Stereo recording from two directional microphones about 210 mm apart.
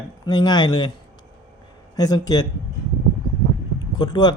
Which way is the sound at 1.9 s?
15° left (ahead or behind).